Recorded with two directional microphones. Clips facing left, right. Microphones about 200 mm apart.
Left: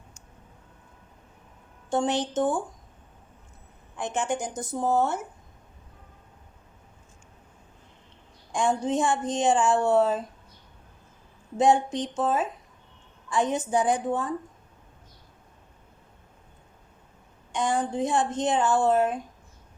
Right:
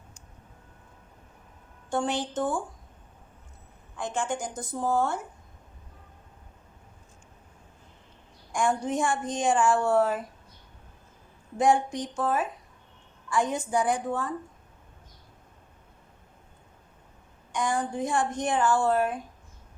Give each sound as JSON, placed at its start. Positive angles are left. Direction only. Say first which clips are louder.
{"t": 1.9, "sound": "a woman's voice", "louder": "left 3 dB", "side_deg": 20}
{"t": 3.9, "sound": "a woman's voice", "louder": "left 2 dB", "side_deg": 20}
{"t": 8.5, "sound": "a woman's voice", "louder": "left 2 dB", "side_deg": 20}
{"t": 11.5, "sound": "a woman's voice", "louder": "left 2 dB", "side_deg": 20}
{"t": 17.5, "sound": "a woman's voice", "louder": "left 2 dB", "side_deg": 25}